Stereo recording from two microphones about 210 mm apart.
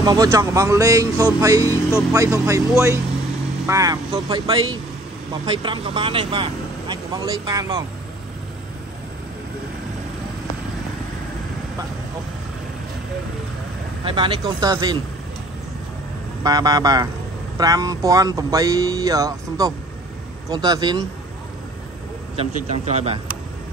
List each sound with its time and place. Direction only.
0.0 s speech: 20° right (ahead or behind)
14.0 s speech: 25° right (ahead or behind)
16.4 s speech: 15° right (ahead or behind)
22.3 s speech: 30° right (ahead or behind)